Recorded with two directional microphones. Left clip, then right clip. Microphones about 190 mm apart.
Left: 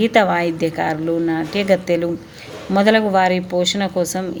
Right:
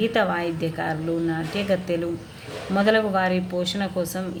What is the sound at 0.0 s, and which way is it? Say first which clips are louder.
Speech: left 7 dB; 40° left (ahead or behind).